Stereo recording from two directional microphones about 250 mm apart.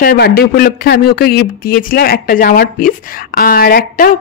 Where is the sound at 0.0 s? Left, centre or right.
Left.